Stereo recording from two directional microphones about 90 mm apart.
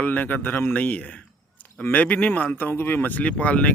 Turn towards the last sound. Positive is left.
turn(degrees=15)  # may be behind; listen again after turning